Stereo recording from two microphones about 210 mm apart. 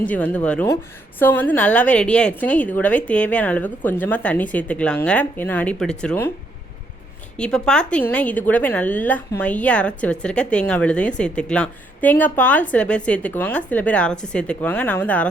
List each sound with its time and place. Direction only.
0.0 s a woman's voice: 5° left (ahead or behind)
7.3 s a woman's voice: 5° left (ahead or behind)